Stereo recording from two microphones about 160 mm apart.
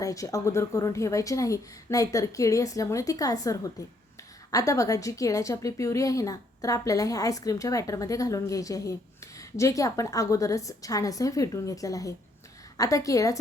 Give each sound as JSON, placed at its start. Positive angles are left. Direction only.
{"t": 0.0, "sound": "a woman's voice", "side_deg": 20}